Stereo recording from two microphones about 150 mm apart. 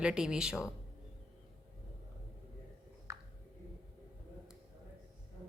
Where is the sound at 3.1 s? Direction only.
20° right (ahead or behind).